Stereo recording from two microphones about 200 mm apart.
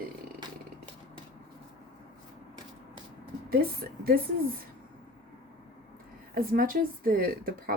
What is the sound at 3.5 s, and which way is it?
Speech, 50° right (ahead or behind).